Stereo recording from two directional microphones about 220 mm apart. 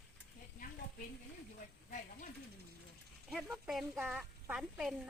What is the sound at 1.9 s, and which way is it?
Speech, 35° left (ahead or behind).